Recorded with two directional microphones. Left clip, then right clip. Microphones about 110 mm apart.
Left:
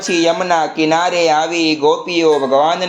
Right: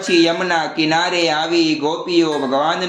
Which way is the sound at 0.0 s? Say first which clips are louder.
Left 1 dB; 25° left (ahead or behind).